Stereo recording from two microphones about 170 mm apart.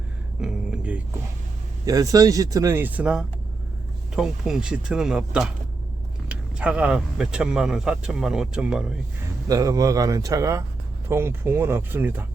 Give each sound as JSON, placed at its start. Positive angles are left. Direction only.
{"t": 0.4, "sound": "a sound", "side_deg": -5}
{"t": 1.8, "sound": "a man's voice", "side_deg": -20}
{"t": 9.5, "sound": "a man's voice", "side_deg": -20}